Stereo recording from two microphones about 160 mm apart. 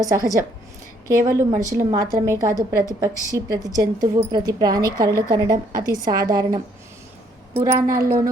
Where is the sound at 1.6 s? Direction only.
20° right (ahead or behind).